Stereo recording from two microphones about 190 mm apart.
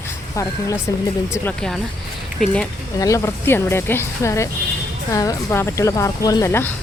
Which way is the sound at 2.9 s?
15° left (ahead or behind).